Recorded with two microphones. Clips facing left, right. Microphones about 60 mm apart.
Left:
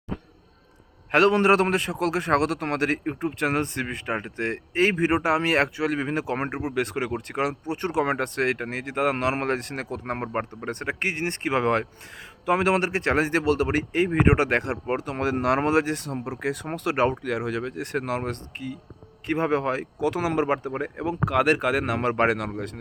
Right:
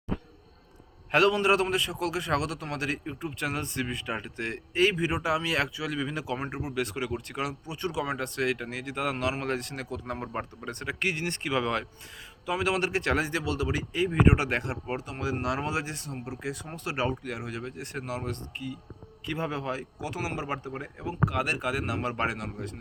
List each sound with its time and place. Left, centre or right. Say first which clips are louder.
1.1 s a man's voice: left 4 dB; left
15.1 s speech: left 8 dB; left
22.4 s speech: left 6 dB; left